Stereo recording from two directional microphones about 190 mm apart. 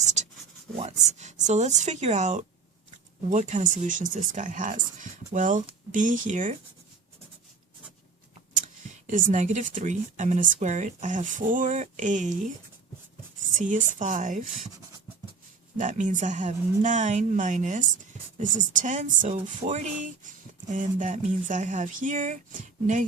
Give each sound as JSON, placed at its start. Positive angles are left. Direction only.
{"t": 0.8, "sound": "speech", "side_deg": -35}
{"t": 9.0, "sound": "speech", "side_deg": -40}
{"t": 13.6, "sound": "speech", "side_deg": -40}
{"t": 15.8, "sound": "speech", "side_deg": -45}